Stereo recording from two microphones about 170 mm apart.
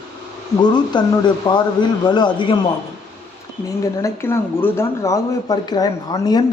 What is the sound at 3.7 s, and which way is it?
Speech, 15° left (ahead or behind).